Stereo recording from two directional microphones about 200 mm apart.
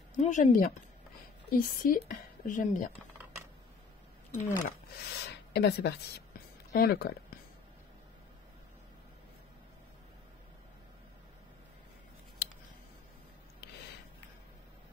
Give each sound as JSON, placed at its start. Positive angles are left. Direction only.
{"t": 0.1, "sound": "speech", "side_deg": 40}
{"t": 4.4, "sound": "speech", "side_deg": 50}